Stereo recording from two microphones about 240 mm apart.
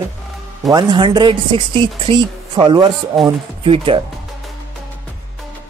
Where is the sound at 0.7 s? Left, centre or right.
Centre.